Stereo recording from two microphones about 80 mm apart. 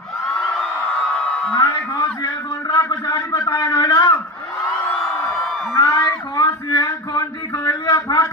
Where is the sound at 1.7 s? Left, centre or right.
Left.